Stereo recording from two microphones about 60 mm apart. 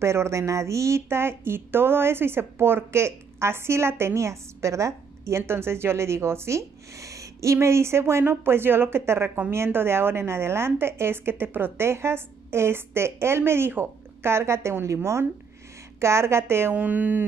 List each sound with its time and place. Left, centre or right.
0.0 s a woman's voice: right
5.4 s a woman's voice: right
7.5 s a woman's voice: right
16.7 s speech: right